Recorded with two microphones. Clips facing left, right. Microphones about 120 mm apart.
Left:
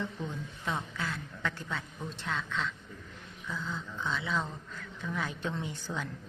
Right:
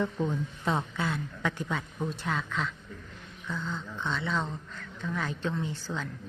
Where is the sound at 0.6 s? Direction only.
30° right (ahead or behind).